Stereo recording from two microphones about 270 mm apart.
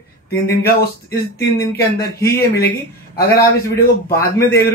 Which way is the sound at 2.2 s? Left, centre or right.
Left.